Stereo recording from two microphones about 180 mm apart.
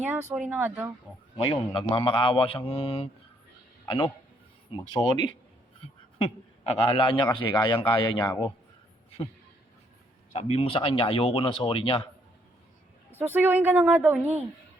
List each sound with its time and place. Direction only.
0.0 s speech: 10° right (ahead or behind)
1.5 s speech: 25° left (ahead or behind)
6.8 s speech: 30° left (ahead or behind)
10.3 s speech: 35° left (ahead or behind)
13.1 s speech: 10° right (ahead or behind)